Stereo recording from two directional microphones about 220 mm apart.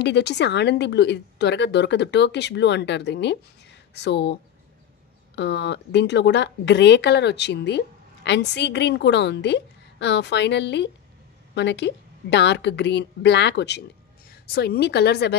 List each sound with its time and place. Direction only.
0.0 s a woman's voice: 50° left (ahead or behind)